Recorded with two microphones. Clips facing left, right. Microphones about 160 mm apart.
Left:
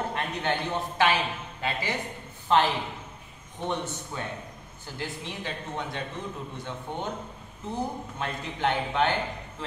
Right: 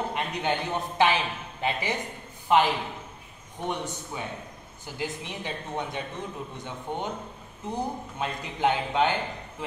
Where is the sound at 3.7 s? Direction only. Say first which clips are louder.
Even; 15° right (ahead or behind).